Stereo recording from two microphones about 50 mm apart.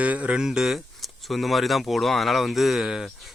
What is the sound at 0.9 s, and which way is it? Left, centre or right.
Speech, centre.